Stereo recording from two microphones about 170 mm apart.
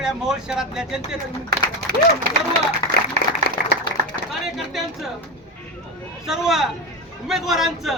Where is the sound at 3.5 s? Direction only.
70° left (ahead or behind).